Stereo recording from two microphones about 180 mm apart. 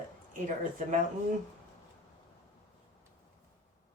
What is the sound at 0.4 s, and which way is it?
Speech, 45° right (ahead or behind).